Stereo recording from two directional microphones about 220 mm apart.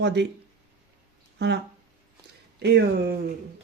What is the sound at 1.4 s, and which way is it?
Speech, 50° right (ahead or behind).